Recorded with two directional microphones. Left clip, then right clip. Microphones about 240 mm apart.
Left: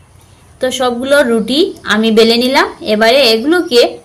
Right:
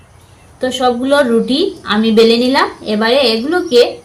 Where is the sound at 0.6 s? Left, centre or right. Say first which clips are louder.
Even; left.